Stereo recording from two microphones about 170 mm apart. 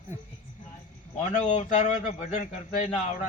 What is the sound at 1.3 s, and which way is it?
Speech, 45° left (ahead or behind).